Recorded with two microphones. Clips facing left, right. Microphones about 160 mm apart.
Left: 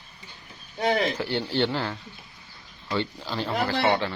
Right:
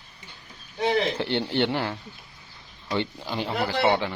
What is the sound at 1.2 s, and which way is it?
Speech, 25° right (ahead or behind).